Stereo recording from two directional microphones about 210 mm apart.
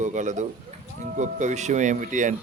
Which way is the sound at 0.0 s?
35° right (ahead or behind).